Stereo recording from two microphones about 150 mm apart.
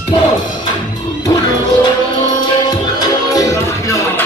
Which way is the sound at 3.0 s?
25° left (ahead or behind).